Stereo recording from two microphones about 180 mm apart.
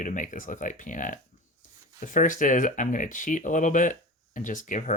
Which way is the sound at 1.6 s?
50° left (ahead or behind).